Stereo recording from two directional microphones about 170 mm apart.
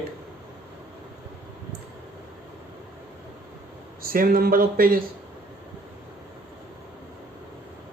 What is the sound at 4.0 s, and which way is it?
Speech, 60° right (ahead or behind).